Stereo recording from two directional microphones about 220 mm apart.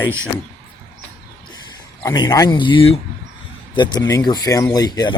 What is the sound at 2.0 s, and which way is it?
Speech, 20° left (ahead or behind).